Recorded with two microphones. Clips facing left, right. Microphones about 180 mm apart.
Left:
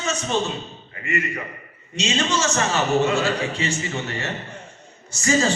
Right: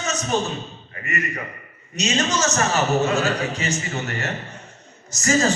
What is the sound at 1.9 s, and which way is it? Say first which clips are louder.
Speech: right 1 dB; 30° left (ahead or behind).